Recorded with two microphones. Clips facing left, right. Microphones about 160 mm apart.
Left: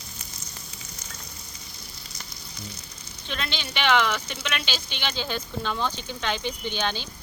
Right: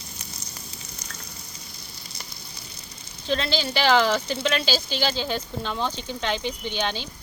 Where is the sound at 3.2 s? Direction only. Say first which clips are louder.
Right 8 dB; 35° right (ahead or behind).